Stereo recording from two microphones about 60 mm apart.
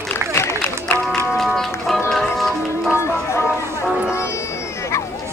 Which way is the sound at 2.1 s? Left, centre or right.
Centre.